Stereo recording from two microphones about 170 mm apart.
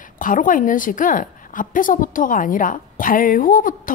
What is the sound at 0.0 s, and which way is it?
Speech, 50° left (ahead or behind).